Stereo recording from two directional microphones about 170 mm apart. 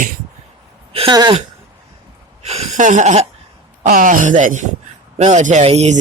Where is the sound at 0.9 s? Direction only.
30° right (ahead or behind).